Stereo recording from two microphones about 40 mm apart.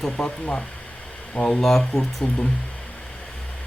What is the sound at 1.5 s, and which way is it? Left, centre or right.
Speech, centre.